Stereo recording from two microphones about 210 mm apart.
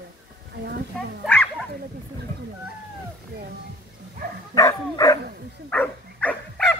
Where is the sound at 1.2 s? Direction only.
5° left (ahead or behind).